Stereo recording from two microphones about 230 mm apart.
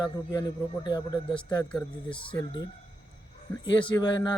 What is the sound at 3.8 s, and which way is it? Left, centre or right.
Speech, centre.